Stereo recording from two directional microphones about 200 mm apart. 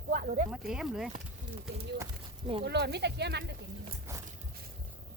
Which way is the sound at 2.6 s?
55° right (ahead or behind).